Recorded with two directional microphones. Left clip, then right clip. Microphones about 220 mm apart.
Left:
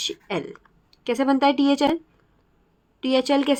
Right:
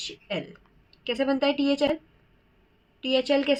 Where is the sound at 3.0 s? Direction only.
50° left (ahead or behind).